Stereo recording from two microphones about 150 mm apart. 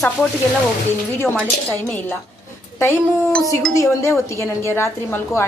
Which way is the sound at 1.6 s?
10° left (ahead or behind).